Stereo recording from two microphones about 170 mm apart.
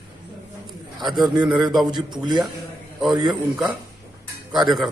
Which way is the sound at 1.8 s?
25° right (ahead or behind).